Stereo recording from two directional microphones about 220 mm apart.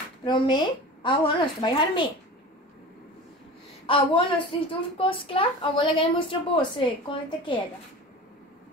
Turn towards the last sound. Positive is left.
turn(degrees=20)  # may be behind; listen again after turning